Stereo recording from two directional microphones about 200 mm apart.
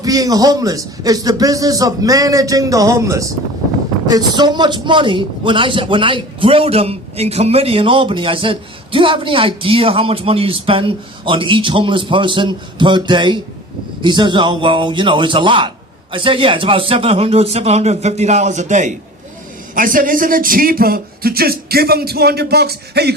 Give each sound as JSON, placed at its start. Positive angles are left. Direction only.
{"t": 0.0, "sound": "a man's voice", "side_deg": -20}